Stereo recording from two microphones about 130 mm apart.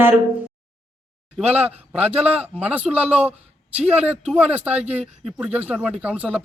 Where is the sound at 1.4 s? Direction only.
10° right (ahead or behind).